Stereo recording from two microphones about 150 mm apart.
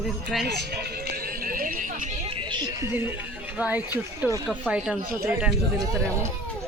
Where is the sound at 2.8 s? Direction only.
15° right (ahead or behind).